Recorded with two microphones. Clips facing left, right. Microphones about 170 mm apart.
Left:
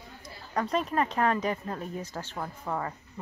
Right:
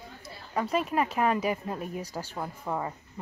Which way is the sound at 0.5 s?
5° right (ahead or behind).